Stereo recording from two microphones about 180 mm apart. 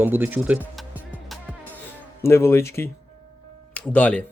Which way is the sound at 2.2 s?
15° left (ahead or behind).